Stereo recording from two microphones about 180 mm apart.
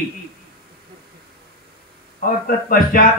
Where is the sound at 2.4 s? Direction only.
50° left (ahead or behind).